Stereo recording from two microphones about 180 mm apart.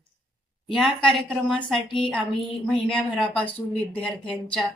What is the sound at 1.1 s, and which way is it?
A woman's voice, 5° left (ahead or behind).